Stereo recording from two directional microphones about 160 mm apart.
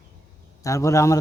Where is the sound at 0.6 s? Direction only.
20° left (ahead or behind).